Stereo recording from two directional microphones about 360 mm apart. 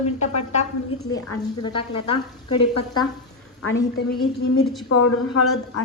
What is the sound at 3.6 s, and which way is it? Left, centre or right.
A woman's voice, left.